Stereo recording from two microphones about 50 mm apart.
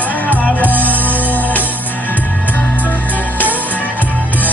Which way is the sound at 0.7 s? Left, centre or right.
Right.